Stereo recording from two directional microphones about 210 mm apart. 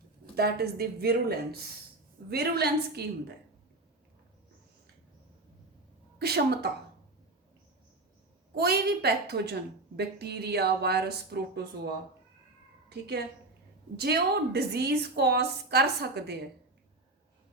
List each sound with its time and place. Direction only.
0.3 s a woman's voice: 50° right (ahead or behind)
6.1 s a woman's voice: 50° right (ahead or behind)
8.5 s a woman's voice: 50° right (ahead or behind)
12.9 s a woman's voice: 50° right (ahead or behind)